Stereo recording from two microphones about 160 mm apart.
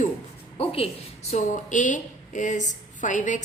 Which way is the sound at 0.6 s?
35° left (ahead or behind).